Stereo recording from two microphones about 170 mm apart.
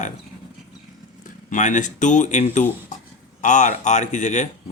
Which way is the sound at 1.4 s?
45° left (ahead or behind).